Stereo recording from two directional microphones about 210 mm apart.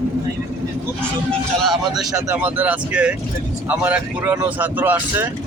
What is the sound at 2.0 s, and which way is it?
Speech, 15° right (ahead or behind).